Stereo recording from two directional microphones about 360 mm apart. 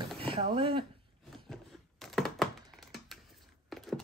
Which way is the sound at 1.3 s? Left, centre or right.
Centre.